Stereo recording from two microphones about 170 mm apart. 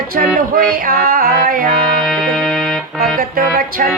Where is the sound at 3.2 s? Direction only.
55° right (ahead or behind).